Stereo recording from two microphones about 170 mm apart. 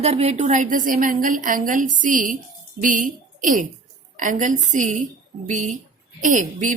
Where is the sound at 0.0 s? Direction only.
40° right (ahead or behind).